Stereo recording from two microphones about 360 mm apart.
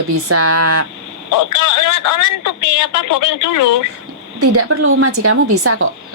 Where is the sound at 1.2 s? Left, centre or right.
Left.